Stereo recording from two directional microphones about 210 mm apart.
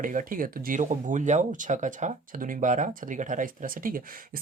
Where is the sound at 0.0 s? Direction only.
40° right (ahead or behind).